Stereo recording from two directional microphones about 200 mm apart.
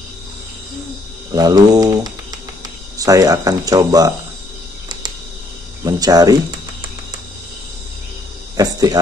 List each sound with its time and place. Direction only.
1.3 s mantra: 20° right (ahead or behind)
3.0 s speech: 15° right (ahead or behind)
5.9 s mantra: 20° right (ahead or behind)
8.5 s speech: 15° right (ahead or behind)